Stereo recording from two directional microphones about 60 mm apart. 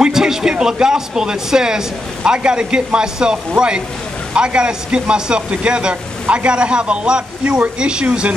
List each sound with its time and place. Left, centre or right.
0.0 s speech: centre